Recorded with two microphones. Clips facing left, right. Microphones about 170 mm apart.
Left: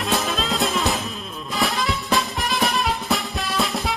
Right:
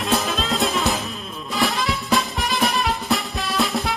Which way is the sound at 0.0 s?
Centre (ahead or behind).